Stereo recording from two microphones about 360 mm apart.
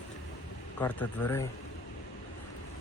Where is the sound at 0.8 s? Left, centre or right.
Centre.